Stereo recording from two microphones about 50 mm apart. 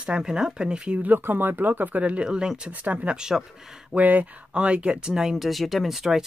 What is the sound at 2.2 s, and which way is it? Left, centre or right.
Speech, centre.